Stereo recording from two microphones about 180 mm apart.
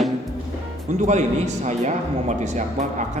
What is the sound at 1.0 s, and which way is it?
A man's voice, 40° right (ahead or behind).